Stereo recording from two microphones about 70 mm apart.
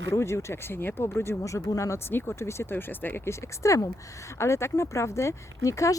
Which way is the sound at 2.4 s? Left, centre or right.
Left.